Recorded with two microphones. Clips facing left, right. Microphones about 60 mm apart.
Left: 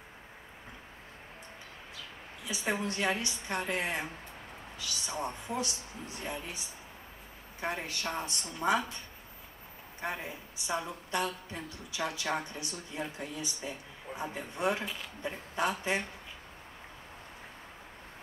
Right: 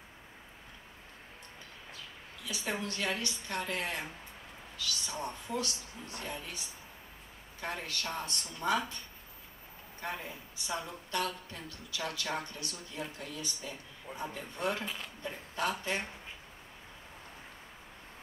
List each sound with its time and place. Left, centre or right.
2.4 s speech: left
7.6 s speech: left
9.9 s speech: centre